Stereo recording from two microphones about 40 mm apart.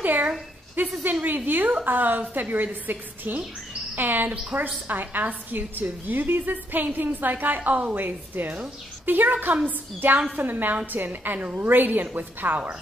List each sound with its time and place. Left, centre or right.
0.0 s a woman's voice: right